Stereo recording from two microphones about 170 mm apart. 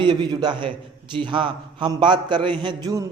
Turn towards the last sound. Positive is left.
turn(degrees=-25)  # may be behind; listen again after turning